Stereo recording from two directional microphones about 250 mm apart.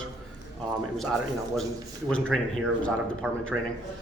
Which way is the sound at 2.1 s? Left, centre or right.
Centre.